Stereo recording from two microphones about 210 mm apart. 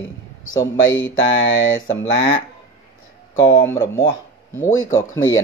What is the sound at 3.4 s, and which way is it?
Speech, 15° left (ahead or behind).